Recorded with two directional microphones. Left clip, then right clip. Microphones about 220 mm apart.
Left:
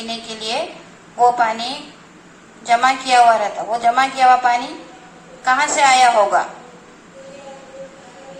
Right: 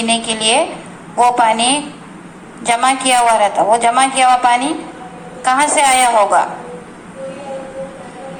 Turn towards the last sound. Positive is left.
turn(degrees=-45)  # may be behind; listen again after turning